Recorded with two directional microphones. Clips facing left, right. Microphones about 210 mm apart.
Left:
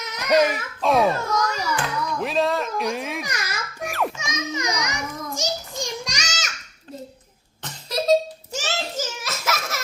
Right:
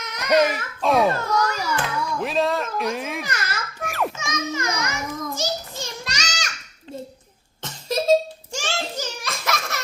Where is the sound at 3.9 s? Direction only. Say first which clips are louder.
Even; centre (ahead or behind).